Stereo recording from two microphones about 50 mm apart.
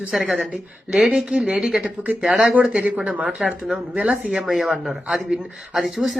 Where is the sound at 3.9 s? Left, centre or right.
Right.